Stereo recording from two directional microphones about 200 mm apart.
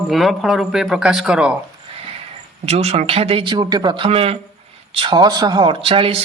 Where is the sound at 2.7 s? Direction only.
30° right (ahead or behind).